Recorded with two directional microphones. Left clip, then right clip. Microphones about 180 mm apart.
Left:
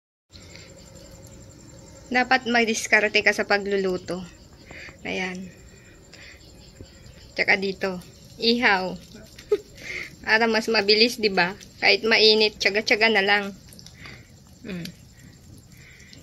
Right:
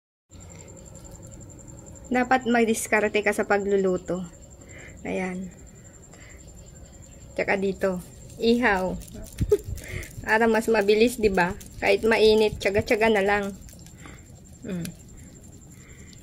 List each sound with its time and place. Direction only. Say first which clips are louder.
2.0 s a woman's voice: left 1 dB; 20° right (ahead or behind)
4.7 s a sound: left 1 dB; 15° right (ahead or behind)
7.3 s a woman's voice: left 3 dB; 15° right (ahead or behind)
9.5 s sheep: right 1 dB; 10° right (ahead or behind)
10.7 s a woman's voice: left 3 dB; 15° right (ahead or behind)